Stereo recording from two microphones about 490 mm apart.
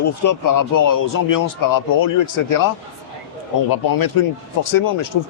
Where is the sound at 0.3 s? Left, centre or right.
Left.